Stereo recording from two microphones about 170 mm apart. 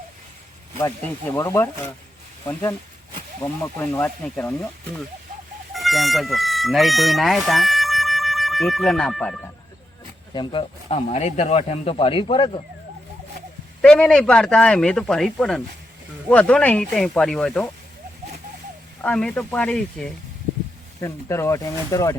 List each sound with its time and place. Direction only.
0.8 s speech: 20° left (ahead or behind)
5.7 s speech: centre (ahead or behind)
10.3 s speech: 30° left (ahead or behind)
13.8 s speech: 5° left (ahead or behind)
19.0 s speech: 5° left (ahead or behind)